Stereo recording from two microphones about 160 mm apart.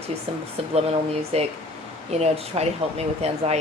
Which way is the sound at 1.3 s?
40° right (ahead or behind).